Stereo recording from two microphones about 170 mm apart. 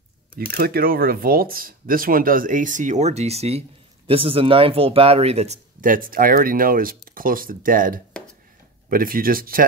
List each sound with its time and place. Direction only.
0.5 s speech: 60° right (ahead or behind)